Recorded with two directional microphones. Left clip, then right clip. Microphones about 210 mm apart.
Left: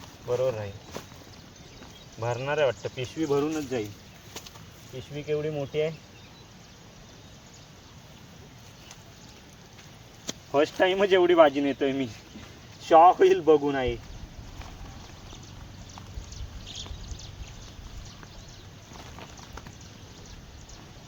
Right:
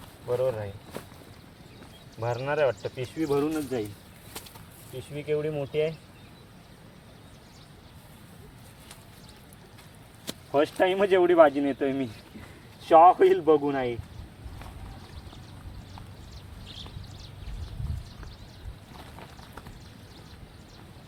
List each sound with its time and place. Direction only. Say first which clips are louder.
0.3 s speech: even; centre (ahead or behind)
2.2 s speech: even; centre (ahead or behind)
5.1 s speech: right 1 dB; 20° right (ahead or behind)
10.2 s speech: left 1 dB; centre (ahead or behind)